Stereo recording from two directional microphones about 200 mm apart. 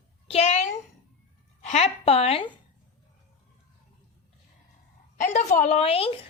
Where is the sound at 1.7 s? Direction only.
30° left (ahead or behind).